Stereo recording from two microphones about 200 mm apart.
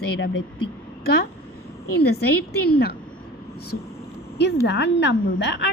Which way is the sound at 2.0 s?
55° left (ahead or behind).